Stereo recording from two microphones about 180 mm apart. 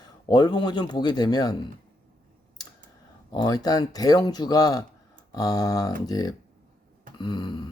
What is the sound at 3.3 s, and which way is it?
Speech, 20° left (ahead or behind).